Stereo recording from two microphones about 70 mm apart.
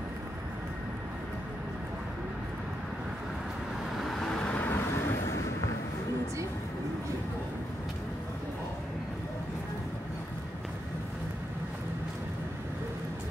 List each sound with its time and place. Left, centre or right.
3.9 s vehicle: centre
4.6 s vehicle: left
4.9 s vehicle: left